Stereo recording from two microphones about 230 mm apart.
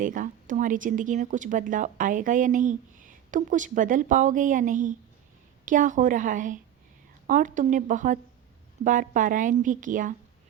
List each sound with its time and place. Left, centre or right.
0.0 s speech: right